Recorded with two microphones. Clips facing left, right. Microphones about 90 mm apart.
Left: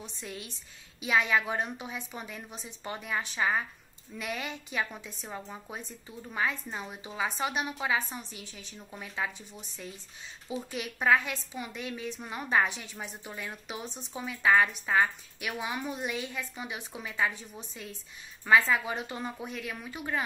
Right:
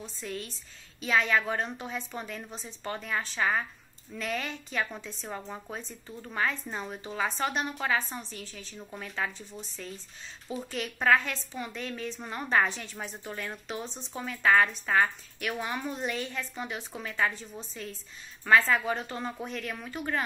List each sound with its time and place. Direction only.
0.0 s a woman's voice: 20° left (ahead or behind)